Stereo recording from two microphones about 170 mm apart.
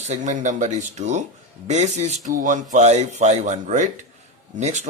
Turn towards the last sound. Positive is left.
turn(degrees=-45)  # may be behind; listen again after turning